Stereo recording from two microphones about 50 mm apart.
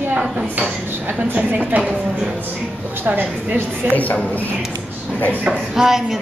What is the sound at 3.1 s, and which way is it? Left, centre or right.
Speech, right.